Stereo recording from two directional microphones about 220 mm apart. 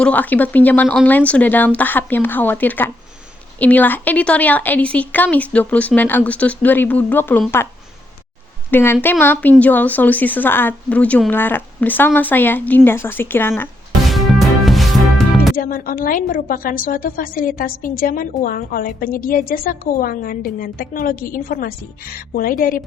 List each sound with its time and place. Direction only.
0.0 s a woman's voice: 5° left (ahead or behind)
8.7 s a woman's voice: 10° left (ahead or behind)
14.1 s music: centre (ahead or behind)
15.5 s a woman's voice: 40° left (ahead or behind)